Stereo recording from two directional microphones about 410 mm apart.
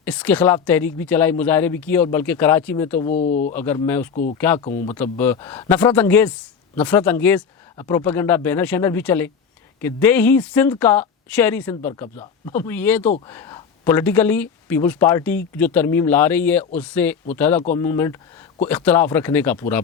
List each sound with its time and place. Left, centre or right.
0.0 s speech: centre
3.1 s speech: centre
3.5 s speech: centre
4.1 s speech: centre
4.4 s speech: centre
4.7 s speech: centre
5.1 s speech: centre
17.6 s speech: centre